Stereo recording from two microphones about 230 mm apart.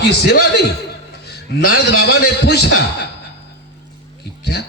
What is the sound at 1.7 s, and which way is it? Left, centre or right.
Speech, left.